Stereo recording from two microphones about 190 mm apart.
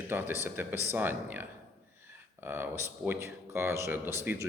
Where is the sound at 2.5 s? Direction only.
10° right (ahead or behind).